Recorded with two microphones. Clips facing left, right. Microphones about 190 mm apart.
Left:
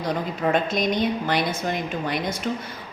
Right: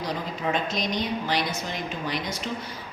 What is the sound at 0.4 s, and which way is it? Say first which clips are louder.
A woman's voice: left 6 dB; 50° left (ahead or behind).